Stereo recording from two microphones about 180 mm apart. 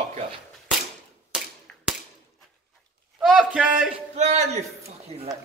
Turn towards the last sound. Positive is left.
turn(degrees=-40)  # may be behind; listen again after turning